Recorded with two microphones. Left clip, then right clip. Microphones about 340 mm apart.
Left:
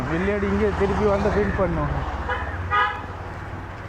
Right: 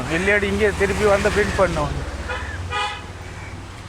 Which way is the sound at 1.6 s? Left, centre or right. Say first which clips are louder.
Right 8 dB; right.